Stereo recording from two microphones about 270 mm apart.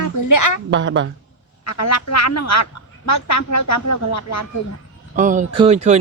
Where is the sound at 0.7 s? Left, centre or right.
Right.